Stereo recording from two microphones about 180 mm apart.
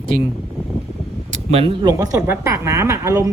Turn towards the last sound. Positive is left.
turn(degrees=-15)  # may be behind; listen again after turning